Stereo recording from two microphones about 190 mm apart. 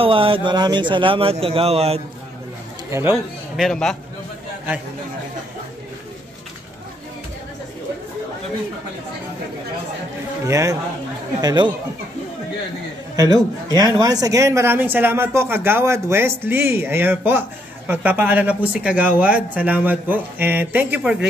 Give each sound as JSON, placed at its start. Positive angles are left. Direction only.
{"t": 0.0, "sound": "a man's voice", "side_deg": -30}
{"t": 2.9, "sound": "speech", "side_deg": -15}
{"t": 3.5, "sound": "a man's voice", "side_deg": 0}
{"t": 10.4, "sound": "a man's voice", "side_deg": -15}
{"t": 13.1, "sound": "speech", "side_deg": -20}